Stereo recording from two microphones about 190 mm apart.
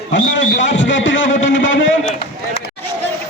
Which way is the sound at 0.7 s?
80° left.